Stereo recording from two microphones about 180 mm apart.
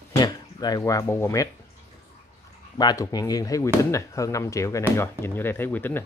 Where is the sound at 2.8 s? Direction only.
20° left (ahead or behind).